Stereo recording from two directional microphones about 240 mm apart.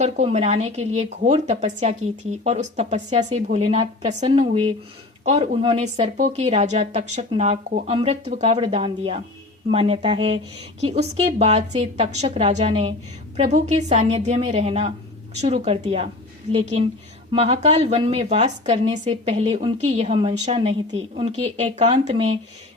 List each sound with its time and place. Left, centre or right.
0.0 s a woman's voice: right